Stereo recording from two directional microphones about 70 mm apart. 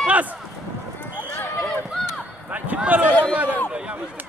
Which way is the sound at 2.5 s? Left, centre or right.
Right.